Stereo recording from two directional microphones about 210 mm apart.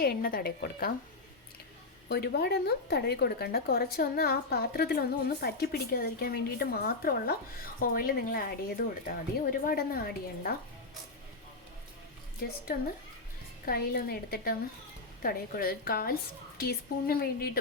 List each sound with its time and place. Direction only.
0.0 s speech: 45° left (ahead or behind)
2.0 s speech: 50° left (ahead or behind)
12.7 s speech: 45° left (ahead or behind)